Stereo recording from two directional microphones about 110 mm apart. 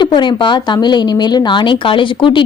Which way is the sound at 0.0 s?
45° left (ahead or behind).